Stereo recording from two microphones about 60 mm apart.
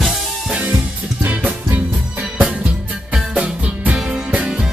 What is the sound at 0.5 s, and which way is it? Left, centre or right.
Music, centre.